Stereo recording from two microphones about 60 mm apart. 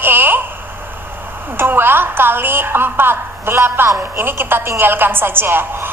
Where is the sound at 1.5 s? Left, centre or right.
Right.